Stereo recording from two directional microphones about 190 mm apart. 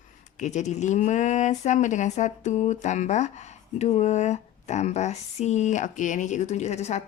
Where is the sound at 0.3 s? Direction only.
40° left (ahead or behind).